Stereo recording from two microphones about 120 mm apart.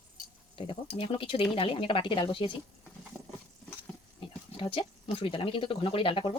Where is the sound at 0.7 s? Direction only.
50° left (ahead or behind).